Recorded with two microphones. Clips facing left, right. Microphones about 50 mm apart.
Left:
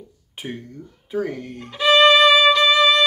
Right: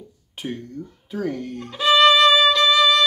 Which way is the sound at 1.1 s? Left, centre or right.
Centre.